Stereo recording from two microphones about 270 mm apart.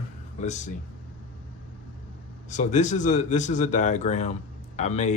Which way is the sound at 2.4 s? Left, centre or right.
Left.